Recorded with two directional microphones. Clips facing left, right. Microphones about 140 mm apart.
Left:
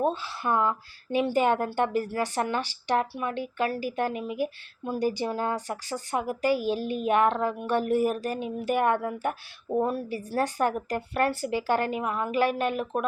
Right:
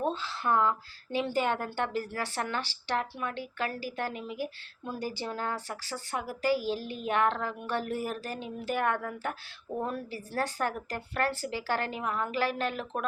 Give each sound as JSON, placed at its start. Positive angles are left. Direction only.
{"t": 0.0, "sound": "speech", "side_deg": 10}